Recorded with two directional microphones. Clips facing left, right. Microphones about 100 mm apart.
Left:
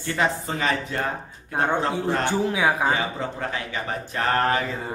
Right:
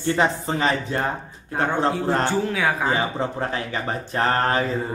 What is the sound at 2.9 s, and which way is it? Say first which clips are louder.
Speech: right 3 dB; 35° right (ahead or behind).